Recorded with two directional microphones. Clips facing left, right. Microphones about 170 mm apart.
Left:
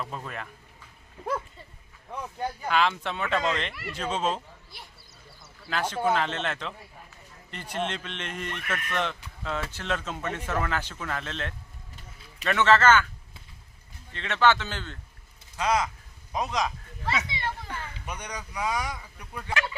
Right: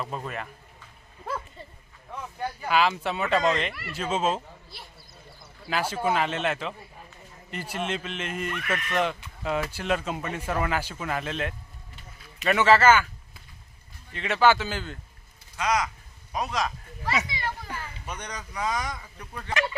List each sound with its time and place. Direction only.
0.1 s speech: 5° right (ahead or behind)
2.6 s speech: 5° right (ahead or behind)
5.6 s speech: 10° right (ahead or behind)
14.1 s speech: 10° right (ahead or behind)
15.5 s a man's voice: 30° left (ahead or behind)
16.6 s speech: 5° right (ahead or behind)
17.4 s children playing: 5° right (ahead or behind)
18.0 s speech: 10° left (ahead or behind)